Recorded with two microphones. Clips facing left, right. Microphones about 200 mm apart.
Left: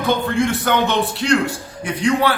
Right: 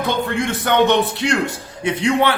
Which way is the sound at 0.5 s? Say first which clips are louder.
Right 3 dB; 20° right (ahead or behind).